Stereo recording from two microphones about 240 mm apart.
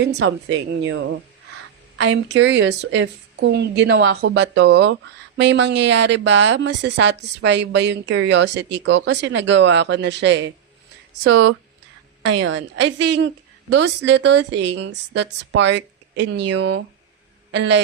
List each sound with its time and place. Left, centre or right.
0.0 s a woman's voice: right